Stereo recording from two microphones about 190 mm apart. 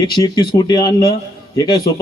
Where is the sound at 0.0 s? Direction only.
20° left (ahead or behind).